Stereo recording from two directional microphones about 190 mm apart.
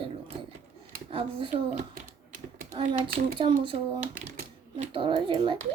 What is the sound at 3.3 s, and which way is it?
Speech, 25° right (ahead or behind).